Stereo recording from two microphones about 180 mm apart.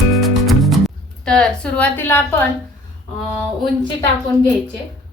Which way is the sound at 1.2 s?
5° left (ahead or behind).